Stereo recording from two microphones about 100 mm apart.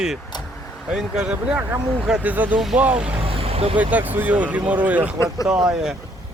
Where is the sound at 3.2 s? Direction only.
75° right (ahead or behind).